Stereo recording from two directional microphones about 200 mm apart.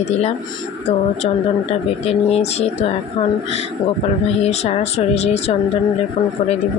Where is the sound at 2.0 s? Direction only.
30° left (ahead or behind).